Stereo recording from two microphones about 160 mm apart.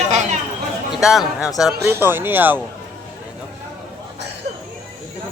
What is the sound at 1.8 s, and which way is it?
Speech, 15° right (ahead or behind).